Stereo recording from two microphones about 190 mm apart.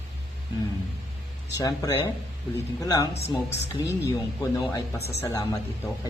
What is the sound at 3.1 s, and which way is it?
Speech, 35° left (ahead or behind).